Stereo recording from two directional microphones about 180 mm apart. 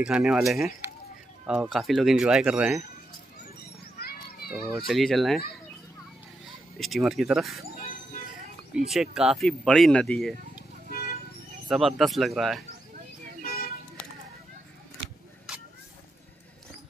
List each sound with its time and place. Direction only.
0.0 s speech: 5° right (ahead or behind)
4.7 s speech: centre (ahead or behind)
6.8 s speech: centre (ahead or behind)
8.7 s speech: centre (ahead or behind)
10.9 s toot: 55° left (ahead or behind)
11.7 s speech: centre (ahead or behind)
13.4 s music: 55° left (ahead or behind)